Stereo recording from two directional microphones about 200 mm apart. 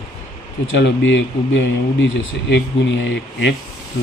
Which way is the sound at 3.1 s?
60° left (ahead or behind).